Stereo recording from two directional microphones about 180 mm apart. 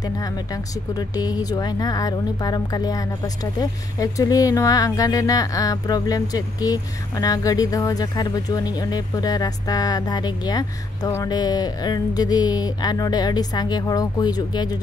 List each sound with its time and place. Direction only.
0.9 s speech: 20° left (ahead or behind)